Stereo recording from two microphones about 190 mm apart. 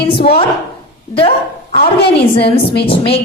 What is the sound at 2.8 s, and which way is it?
Speech, 30° left (ahead or behind).